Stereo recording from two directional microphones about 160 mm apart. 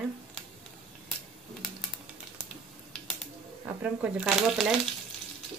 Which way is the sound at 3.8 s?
5° right (ahead or behind).